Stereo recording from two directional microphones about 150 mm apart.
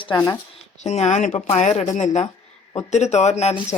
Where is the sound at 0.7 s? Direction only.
50° left (ahead or behind).